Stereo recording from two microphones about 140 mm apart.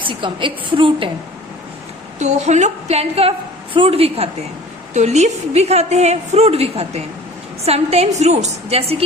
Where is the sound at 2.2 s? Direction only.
55° right (ahead or behind).